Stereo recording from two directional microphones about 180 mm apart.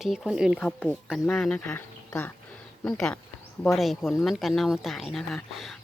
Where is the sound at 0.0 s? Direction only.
5° right (ahead or behind).